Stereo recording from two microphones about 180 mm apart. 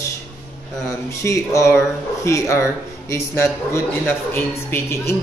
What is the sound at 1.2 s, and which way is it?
Speech, 15° left (ahead or behind).